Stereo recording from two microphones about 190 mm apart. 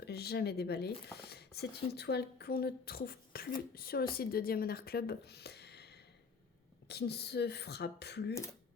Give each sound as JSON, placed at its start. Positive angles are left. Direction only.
{"t": 0.0, "sound": "speech", "side_deg": 55}